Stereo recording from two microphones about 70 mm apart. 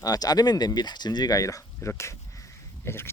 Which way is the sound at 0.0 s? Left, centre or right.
Left.